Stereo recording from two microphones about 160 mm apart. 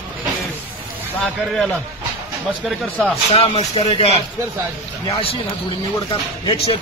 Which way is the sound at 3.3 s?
35° left (ahead or behind).